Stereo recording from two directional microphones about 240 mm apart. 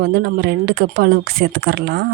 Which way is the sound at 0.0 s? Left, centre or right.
Right.